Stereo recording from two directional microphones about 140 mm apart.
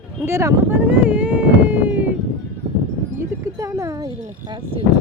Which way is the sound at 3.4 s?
20° right (ahead or behind).